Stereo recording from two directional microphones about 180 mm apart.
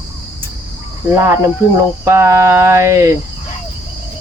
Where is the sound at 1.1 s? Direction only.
15° right (ahead or behind).